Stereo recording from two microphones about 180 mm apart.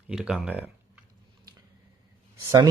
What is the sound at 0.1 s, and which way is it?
Speech, 5° right (ahead or behind).